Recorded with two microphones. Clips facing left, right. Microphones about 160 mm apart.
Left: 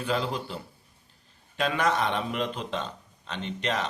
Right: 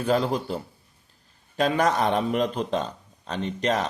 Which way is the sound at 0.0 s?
45° right (ahead or behind).